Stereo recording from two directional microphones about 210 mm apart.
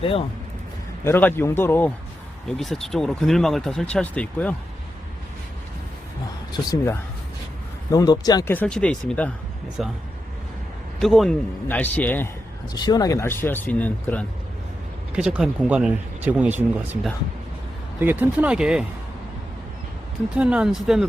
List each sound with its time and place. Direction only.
0.0 s speech: 25° left (ahead or behind)
1.0 s speech: 10° left (ahead or behind)
6.5 s speech: 20° left (ahead or behind); by 9.9 s centre (ahead or behind)
11.0 s speech: centre (ahead or behind)
12.7 s speech: 20° left (ahead or behind)
15.1 s speech: 5° right (ahead or behind)
20.3 s speech: 5° right (ahead or behind)